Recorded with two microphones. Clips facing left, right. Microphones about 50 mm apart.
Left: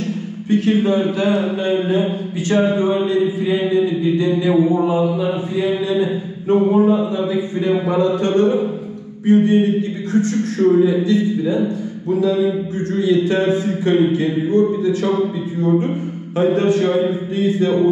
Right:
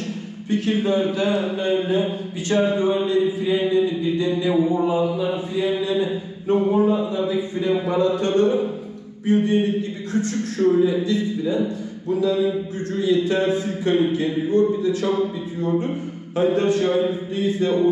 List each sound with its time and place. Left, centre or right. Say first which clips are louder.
0.5 s a man's voice: left 5 dB; left